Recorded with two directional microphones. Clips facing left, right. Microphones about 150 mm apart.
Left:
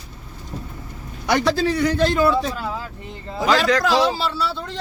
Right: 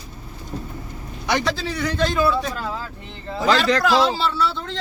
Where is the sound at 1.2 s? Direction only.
50° left (ahead or behind).